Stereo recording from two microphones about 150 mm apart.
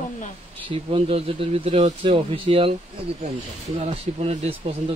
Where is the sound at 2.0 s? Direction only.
35° right (ahead or behind).